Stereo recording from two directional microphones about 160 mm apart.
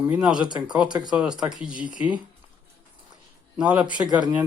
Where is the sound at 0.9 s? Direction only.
25° right (ahead or behind).